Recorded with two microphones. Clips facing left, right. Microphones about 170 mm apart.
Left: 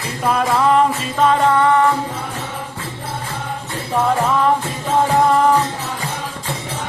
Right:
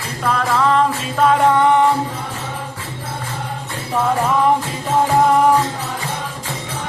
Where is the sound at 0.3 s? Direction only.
15° left (ahead or behind).